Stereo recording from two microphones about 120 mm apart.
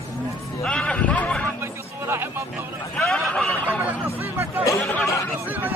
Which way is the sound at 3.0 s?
5° left (ahead or behind).